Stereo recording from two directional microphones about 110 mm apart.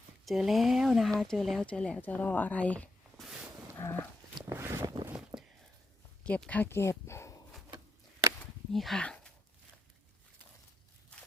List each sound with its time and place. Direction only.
0.3 s speech: centre (ahead or behind)
3.8 s dog: 20° left (ahead or behind)
4.4 s boat: 25° right (ahead or behind)
5.3 s a sound: 40° right (ahead or behind)
6.2 s speech: 10° left (ahead or behind)
8.7 s speech: centre (ahead or behind)